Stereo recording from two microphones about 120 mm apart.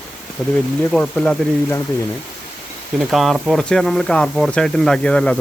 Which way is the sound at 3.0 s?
Centre (ahead or behind).